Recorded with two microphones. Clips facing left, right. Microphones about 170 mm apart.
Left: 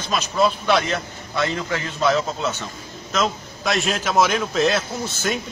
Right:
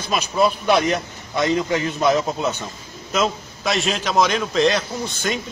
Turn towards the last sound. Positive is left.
turn(degrees=5)  # may be behind; listen again after turning